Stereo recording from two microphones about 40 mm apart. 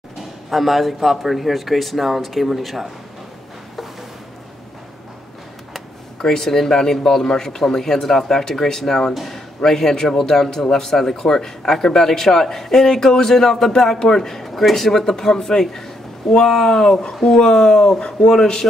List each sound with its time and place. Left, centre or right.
0.5 s speech: centre
6.2 s speech: centre